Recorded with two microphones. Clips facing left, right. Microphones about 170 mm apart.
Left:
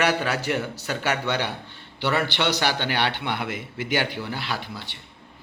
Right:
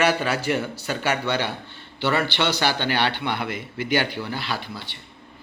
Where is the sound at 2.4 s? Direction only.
15° left (ahead or behind).